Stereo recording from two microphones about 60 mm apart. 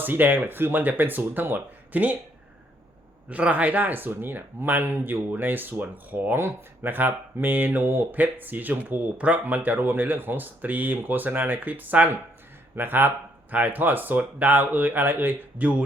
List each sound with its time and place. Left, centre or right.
0.0 s speech: right
3.2 s speech: right